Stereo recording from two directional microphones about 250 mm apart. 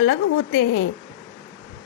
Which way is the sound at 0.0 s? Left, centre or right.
Left.